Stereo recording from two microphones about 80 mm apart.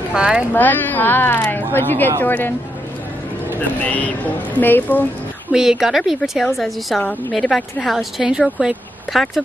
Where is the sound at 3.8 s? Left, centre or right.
Centre.